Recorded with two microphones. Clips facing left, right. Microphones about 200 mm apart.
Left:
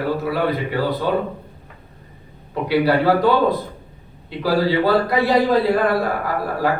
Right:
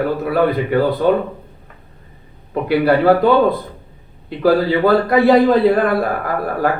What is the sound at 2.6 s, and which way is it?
Speech, 55° right (ahead or behind).